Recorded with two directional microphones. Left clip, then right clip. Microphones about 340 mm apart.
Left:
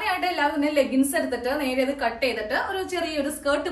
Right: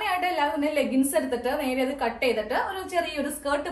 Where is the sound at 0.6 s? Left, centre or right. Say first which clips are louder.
Left 3 dB; centre.